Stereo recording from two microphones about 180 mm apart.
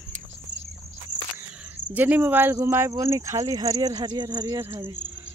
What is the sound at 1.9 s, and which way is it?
Speech, 10° right (ahead or behind).